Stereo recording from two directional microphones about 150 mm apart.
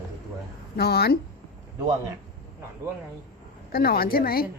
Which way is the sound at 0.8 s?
90° left.